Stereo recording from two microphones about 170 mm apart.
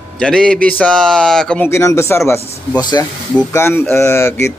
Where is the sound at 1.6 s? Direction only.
15° left (ahead or behind).